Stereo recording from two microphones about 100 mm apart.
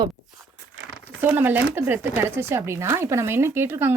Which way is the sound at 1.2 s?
20° right (ahead or behind).